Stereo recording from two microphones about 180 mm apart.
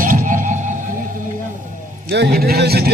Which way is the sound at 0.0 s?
50° right (ahead or behind).